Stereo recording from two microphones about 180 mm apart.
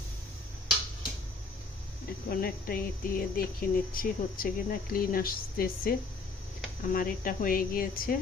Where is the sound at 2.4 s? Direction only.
55° left (ahead or behind).